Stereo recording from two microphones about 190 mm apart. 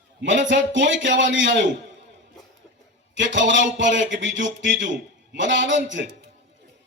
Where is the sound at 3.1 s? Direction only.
75° right (ahead or behind).